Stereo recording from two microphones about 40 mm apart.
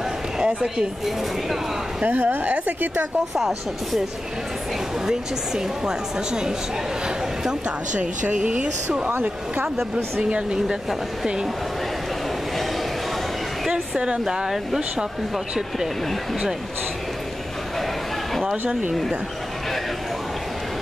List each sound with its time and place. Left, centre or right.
0.5 s speech: right
2.0 s speech: right
3.3 s speech: centre
5.0 s speech: centre
7.9 s speech: right
13.7 s a woman's voice: right